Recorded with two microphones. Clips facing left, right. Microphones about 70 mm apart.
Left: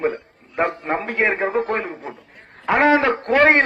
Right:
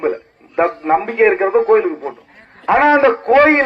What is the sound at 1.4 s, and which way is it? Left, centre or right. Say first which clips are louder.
Speech: right 9 dB; right.